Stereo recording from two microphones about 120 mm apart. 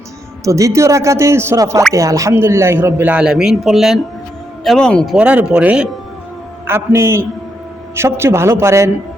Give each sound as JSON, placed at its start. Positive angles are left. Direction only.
{"t": 0.4, "sound": "a man's voice", "side_deg": -25}
{"t": 5.1, "sound": "a man's voice", "side_deg": -10}
{"t": 6.7, "sound": "speech", "side_deg": -20}